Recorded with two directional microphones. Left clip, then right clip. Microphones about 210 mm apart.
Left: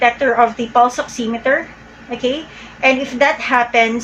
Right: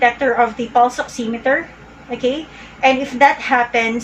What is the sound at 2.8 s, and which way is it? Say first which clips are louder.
A woman's voice: right 1 dB; 20° left (ahead or behind).